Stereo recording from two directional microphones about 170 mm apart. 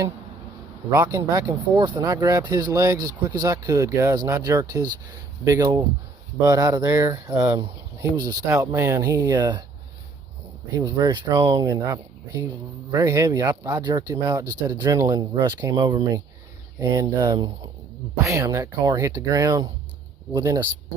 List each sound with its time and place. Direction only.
0.9 s speech: 20° right (ahead or behind)
10.7 s speech: 20° right (ahead or behind)